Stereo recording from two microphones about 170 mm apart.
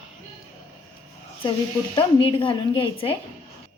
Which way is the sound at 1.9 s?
30° left (ahead or behind).